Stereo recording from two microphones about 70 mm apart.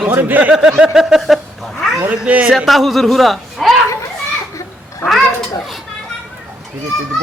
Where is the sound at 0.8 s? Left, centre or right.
Centre.